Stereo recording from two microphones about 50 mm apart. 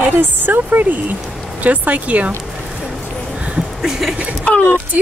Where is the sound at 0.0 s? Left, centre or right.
Right.